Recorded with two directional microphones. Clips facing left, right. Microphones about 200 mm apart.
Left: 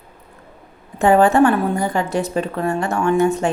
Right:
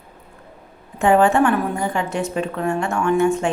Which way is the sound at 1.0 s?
40° left (ahead or behind).